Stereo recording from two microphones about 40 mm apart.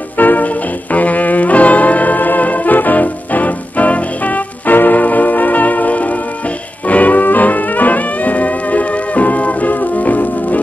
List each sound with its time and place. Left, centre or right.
0.2 s music: left